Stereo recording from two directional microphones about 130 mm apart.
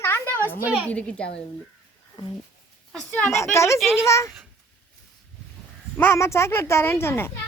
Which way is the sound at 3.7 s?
Centre (ahead or behind).